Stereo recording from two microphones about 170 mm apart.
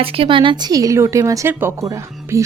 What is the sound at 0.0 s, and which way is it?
A woman's voice, 30° right (ahead or behind).